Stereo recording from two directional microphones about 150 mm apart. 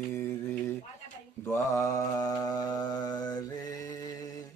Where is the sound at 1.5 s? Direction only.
20° left (ahead or behind).